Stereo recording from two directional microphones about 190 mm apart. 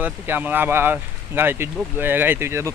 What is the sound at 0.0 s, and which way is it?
Speech, 10° right (ahead or behind).